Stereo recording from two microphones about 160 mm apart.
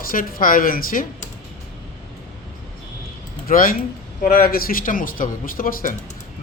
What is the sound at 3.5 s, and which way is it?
A man's voice, 60° left (ahead or behind).